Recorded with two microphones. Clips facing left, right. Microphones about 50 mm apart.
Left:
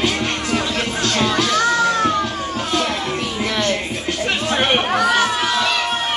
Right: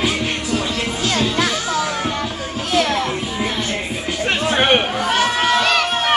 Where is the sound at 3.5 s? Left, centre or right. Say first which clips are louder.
Left 3 dB; left.